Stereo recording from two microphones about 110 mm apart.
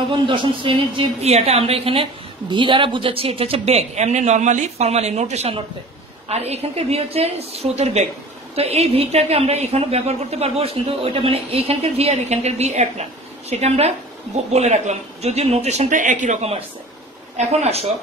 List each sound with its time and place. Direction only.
0.3 s a man's voice: 50° right (ahead or behind)
1.2 s a woman's voice: 75° right (ahead or behind)
13.5 s a man's voice: 75° right (ahead or behind)